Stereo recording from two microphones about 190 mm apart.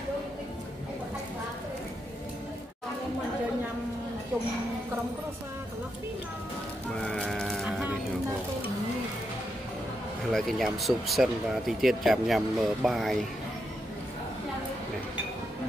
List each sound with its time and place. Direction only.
7.0 s sheep: 5° left (ahead or behind)
10.3 s speech: centre (ahead or behind)